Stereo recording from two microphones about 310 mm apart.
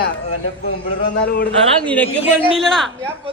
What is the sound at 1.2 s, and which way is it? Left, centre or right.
Speech, left.